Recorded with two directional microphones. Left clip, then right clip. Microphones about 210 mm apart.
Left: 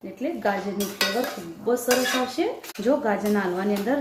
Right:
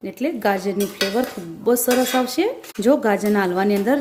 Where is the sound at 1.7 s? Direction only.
55° right (ahead or behind).